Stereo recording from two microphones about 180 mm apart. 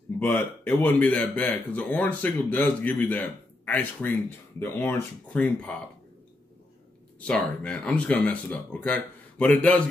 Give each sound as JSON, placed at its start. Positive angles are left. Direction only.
{"t": 0.2, "sound": "speech", "side_deg": 10}
{"t": 7.2, "sound": "speech", "side_deg": 5}